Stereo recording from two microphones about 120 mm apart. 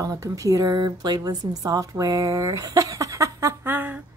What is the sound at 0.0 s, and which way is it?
A woman's voice, 25° right (ahead or behind).